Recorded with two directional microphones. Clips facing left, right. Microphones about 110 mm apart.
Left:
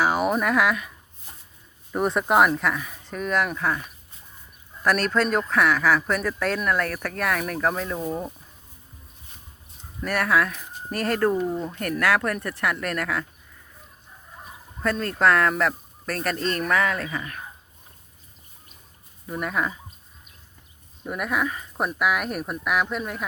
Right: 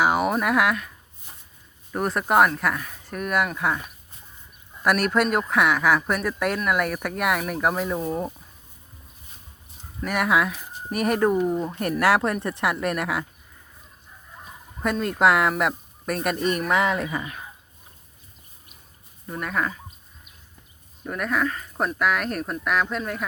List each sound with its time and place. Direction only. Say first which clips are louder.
0.1 s speech: even; centre (ahead or behind)
1.9 s speech: left 1 dB; centre (ahead or behind)
8.0 s speech: right 2 dB; centre (ahead or behind)
10.0 s speech: even; 15° right (ahead or behind)
14.9 s speech: right 1 dB; 10° right (ahead or behind)
19.3 s speech: even; 5° left (ahead or behind)
21.1 s speech: right 1 dB; 10° left (ahead or behind)